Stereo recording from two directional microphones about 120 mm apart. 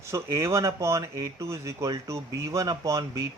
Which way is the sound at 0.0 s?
25° right (ahead or behind).